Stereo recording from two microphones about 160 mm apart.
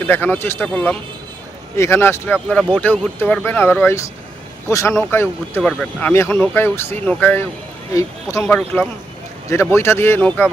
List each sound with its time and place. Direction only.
0.0 s speech: 10° left (ahead or behind)